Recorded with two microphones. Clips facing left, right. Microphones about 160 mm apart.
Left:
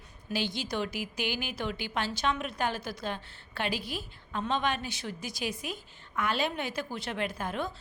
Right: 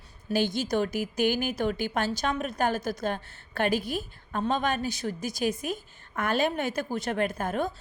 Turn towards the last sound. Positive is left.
turn(degrees=-45)  # may be behind; listen again after turning